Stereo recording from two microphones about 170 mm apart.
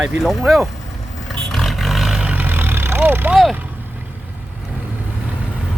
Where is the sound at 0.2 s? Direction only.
Centre (ahead or behind).